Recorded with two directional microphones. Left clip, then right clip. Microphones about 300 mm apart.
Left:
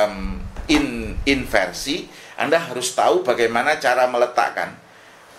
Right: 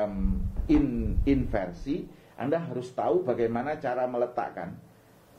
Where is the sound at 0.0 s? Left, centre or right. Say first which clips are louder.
Left 10 dB; centre.